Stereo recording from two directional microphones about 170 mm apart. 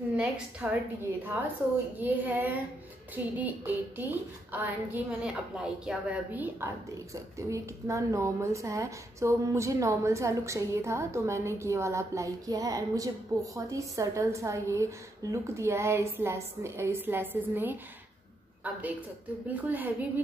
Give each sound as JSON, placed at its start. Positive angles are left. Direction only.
{"t": 0.1, "sound": "a woman's voice", "side_deg": -5}
{"t": 2.0, "sound": "a woman's voice", "side_deg": -10}